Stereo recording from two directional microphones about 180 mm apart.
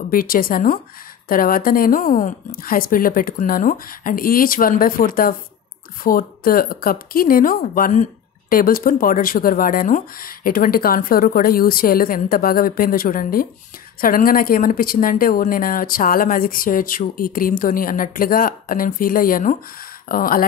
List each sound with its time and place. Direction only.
0.1 s speech: 55° left (ahead or behind)